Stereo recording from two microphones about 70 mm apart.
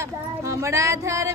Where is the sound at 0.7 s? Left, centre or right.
Right.